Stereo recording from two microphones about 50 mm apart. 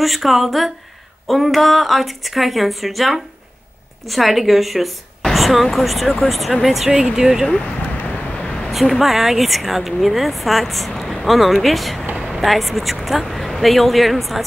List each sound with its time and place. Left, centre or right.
0.0 s speech: centre
7.5 s vehicle: left
8.3 s a sound: left
8.6 s speech: centre